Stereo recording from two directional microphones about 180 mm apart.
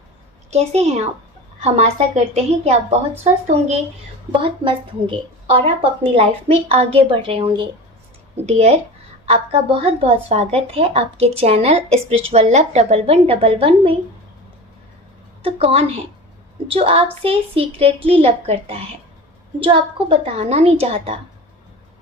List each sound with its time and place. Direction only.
0.5 s a woman's voice: 35° right (ahead or behind)
4.4 s a woman's voice: 30° right (ahead or behind)
15.4 s a woman's voice: 35° right (ahead or behind)